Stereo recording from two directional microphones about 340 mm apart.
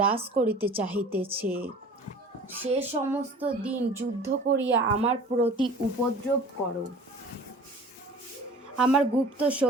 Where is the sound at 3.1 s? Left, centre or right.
Centre.